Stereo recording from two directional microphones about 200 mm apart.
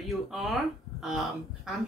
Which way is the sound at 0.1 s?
Centre (ahead or behind).